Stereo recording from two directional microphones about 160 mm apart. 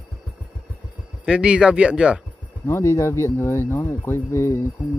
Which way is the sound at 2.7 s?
15° left (ahead or behind).